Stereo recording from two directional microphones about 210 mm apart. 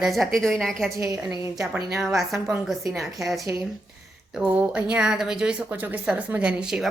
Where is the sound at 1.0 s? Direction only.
15° right (ahead or behind).